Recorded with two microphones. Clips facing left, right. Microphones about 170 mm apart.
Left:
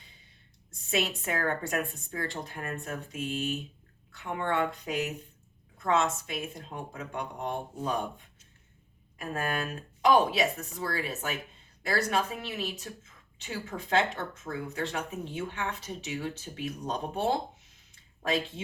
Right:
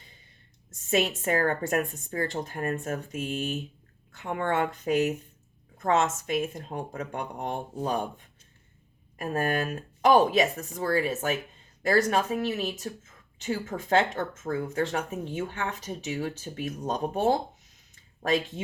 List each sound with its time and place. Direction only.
0.9 s a woman's voice: 45° right (ahead or behind)
9.1 s a woman's voice: 50° right (ahead or behind)